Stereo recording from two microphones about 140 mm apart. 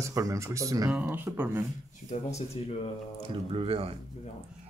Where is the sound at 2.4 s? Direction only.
45° left (ahead or behind).